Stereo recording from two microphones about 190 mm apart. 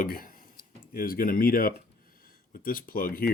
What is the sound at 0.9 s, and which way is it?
Speech, 50° left (ahead or behind).